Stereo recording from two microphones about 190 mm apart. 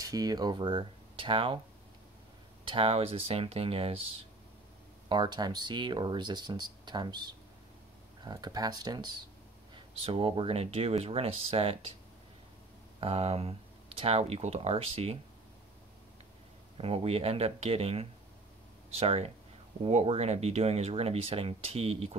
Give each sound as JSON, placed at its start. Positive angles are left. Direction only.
{"t": 0.0, "sound": "speech", "side_deg": -20}
{"t": 2.6, "sound": "speech", "side_deg": -30}
{"t": 5.1, "sound": "speech", "side_deg": -25}
{"t": 13.0, "sound": "speech", "side_deg": -30}
{"t": 16.8, "sound": "speech", "side_deg": -30}